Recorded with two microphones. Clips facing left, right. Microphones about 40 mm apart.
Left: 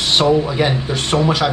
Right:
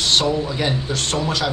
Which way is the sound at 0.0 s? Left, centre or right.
Left.